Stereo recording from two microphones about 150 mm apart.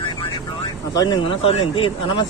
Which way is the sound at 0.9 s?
30° left (ahead or behind).